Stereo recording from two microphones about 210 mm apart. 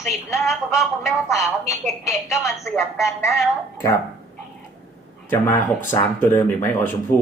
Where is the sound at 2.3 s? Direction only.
15° left (ahead or behind).